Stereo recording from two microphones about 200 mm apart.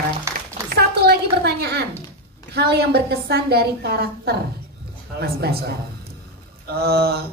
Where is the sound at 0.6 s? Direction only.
50° right (ahead or behind).